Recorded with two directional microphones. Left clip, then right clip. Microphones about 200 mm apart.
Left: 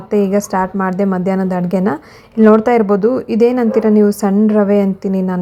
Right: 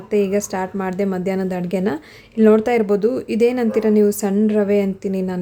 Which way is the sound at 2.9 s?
15° right (ahead or behind).